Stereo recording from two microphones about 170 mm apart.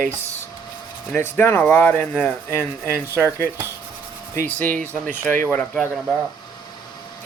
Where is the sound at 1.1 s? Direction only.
10° left (ahead or behind).